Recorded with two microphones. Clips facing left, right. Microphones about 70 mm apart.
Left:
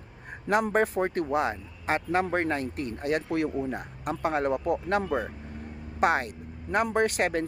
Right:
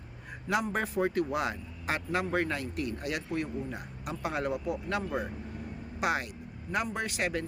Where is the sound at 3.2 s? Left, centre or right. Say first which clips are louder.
Left 6 dB; left.